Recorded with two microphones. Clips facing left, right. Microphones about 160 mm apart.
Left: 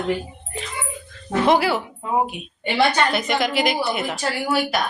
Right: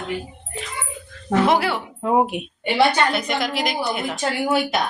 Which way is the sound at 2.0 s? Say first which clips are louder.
Right 8 dB; 65° right (ahead or behind).